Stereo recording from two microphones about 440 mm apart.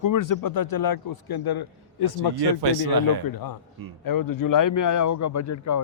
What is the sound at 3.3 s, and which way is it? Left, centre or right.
A man's voice, left.